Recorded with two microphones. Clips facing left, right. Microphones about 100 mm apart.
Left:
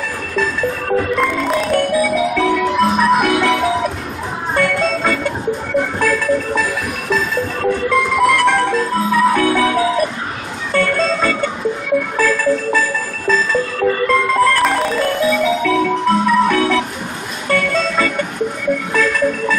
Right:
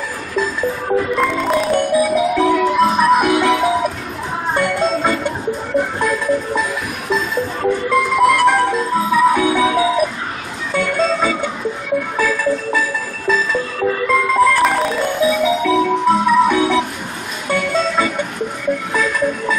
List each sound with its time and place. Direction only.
0.4 s music: 5° right (ahead or behind)
1.7 s music: 20° right (ahead or behind)
2.0 s music: 10° right (ahead or behind)